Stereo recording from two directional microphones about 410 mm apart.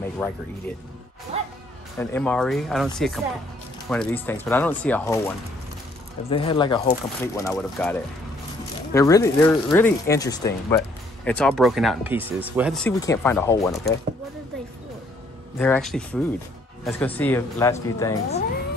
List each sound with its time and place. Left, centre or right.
0.2 s speech: centre
1.3 s music: centre
2.0 s speech: centre
6.3 s speech: centre
15.6 s speech: centre